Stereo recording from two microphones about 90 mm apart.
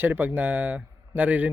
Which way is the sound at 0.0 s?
20° right (ahead or behind).